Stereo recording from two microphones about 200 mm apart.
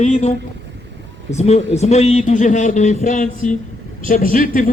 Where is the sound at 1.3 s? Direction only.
35° left (ahead or behind).